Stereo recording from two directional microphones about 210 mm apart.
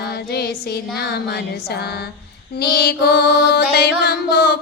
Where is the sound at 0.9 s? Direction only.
50° left (ahead or behind).